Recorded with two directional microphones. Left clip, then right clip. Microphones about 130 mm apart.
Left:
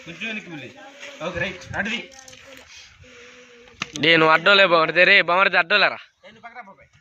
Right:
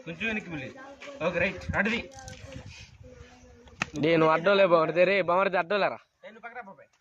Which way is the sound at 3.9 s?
5° right (ahead or behind).